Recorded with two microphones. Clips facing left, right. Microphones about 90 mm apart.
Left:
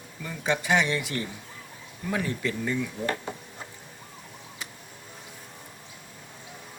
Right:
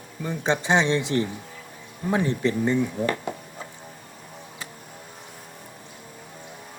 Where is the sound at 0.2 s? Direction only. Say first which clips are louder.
Right 4 dB; 25° right (ahead or behind).